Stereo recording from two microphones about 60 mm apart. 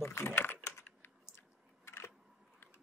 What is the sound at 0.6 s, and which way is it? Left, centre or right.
Computer keyboard, left.